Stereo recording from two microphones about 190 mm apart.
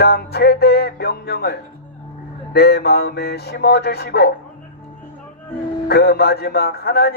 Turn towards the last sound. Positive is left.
turn(degrees=55)  # may be behind; listen again after turning